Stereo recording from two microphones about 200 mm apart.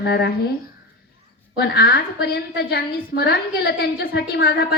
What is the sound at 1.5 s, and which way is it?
A woman's voice, 50° left (ahead or behind).